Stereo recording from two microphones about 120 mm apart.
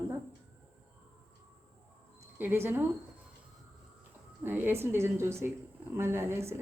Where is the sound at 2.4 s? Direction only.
20° right (ahead or behind).